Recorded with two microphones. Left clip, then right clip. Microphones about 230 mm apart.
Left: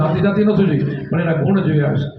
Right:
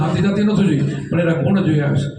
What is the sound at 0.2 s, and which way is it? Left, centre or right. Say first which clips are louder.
Speech: left 4 dB; right.